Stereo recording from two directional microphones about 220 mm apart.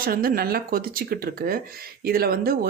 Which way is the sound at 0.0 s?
40° right (ahead or behind).